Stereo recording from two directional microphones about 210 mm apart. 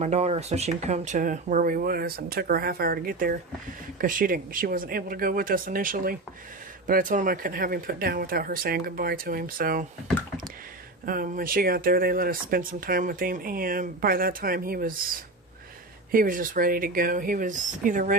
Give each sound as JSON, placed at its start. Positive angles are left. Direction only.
{"t": 0.0, "sound": "speech", "side_deg": -30}
{"t": 11.0, "sound": "speech", "side_deg": -40}
{"t": 16.1, "sound": "speech", "side_deg": -40}